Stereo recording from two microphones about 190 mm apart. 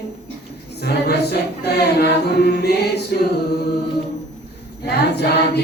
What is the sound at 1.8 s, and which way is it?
Chant, 60° left (ahead or behind).